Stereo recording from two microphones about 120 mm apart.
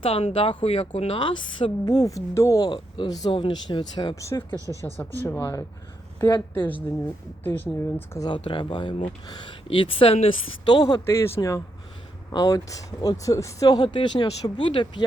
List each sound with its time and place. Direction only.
0.0 s speech: 55° left (ahead or behind)
1.2 s speech: 40° left (ahead or behind); by 2.6 s 25° left (ahead or behind)
2.6 s speech: 40° left (ahead or behind)
4.2 s speech: 25° left (ahead or behind)
4.5 s speech: 25° right (ahead or behind)
5.2 s speech: 25° left (ahead or behind)
7.4 s speech: 15° left (ahead or behind)
8.2 s speech: 40° left (ahead or behind)
9.6 s speech: 45° left (ahead or behind)
10.7 s speech: 35° left (ahead or behind)
11.0 s speech: 20° left (ahead or behind); by 15.0 s 40° left (ahead or behind)